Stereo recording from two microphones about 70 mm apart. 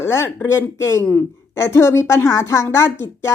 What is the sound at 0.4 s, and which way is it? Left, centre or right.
A woman's voice, left.